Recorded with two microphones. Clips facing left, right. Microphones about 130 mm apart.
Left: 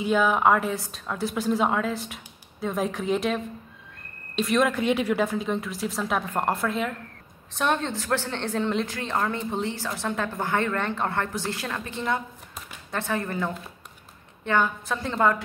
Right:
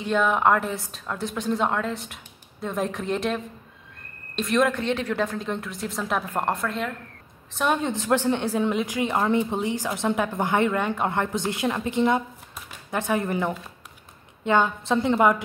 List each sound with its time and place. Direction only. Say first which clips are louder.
0.0 s a woman's voice: even; 5° left (ahead or behind)
7.9 s a woman's voice: right 5 dB; 20° right (ahead or behind)